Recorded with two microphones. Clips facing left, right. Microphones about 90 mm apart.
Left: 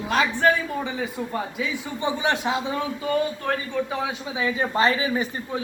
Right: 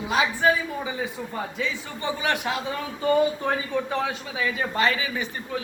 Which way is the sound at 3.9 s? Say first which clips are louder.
Right 1 dB; 10° left (ahead or behind).